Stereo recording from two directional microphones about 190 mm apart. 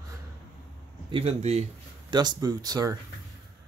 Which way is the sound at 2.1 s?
20° right (ahead or behind).